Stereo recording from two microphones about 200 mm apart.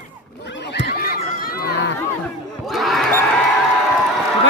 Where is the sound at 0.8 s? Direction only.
50° left (ahead or behind).